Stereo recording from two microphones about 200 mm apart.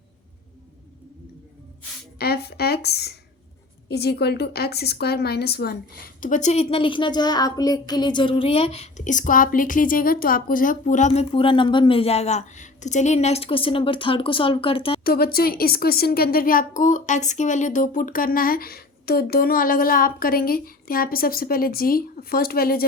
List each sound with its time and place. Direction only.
2.1 s a woman's voice: 50° left (ahead or behind); by 15.0 s 30° left (ahead or behind)
15.0 s a woman's voice: 50° left (ahead or behind)